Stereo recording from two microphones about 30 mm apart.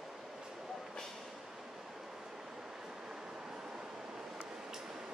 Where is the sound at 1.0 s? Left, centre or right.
Centre.